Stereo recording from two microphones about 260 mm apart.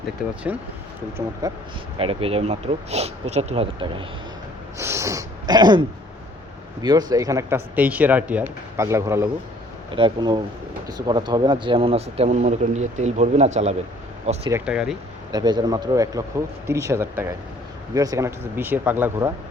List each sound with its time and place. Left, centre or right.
0.5 s speech: centre
4.8 s a sound: centre
6.8 s speech: centre
14.5 s speech: centre
15.3 s speech: centre